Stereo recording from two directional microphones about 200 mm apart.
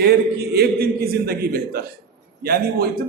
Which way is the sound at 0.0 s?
50° right (ahead or behind).